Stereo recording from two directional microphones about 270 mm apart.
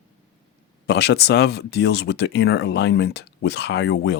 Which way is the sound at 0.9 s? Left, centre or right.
Left.